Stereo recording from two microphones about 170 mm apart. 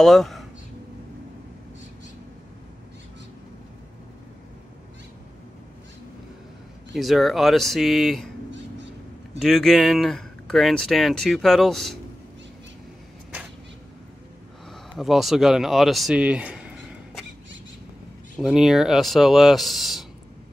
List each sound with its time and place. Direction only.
0.0 s speech: centre (ahead or behind)
6.9 s speech: centre (ahead or behind)
8.5 s a sound: 90° right
9.4 s speech: centre (ahead or behind)
15.0 s speech: centre (ahead or behind)
18.3 s speech: centre (ahead or behind)